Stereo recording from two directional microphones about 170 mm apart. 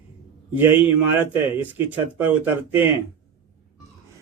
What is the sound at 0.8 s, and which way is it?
A man's voice, 10° right (ahead or behind).